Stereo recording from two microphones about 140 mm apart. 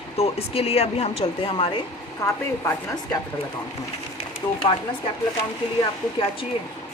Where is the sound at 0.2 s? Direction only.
45° left (ahead or behind).